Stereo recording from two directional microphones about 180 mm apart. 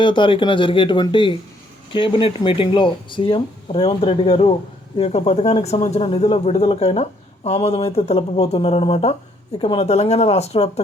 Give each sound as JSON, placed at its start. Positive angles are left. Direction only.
{"t": 0.0, "sound": "speech", "side_deg": 25}